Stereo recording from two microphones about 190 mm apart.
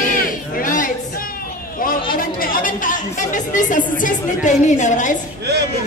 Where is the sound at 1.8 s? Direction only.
50° left (ahead or behind).